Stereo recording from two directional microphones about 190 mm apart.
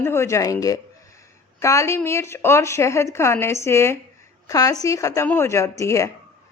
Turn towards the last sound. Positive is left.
turn(degrees=15)  # may be behind; listen again after turning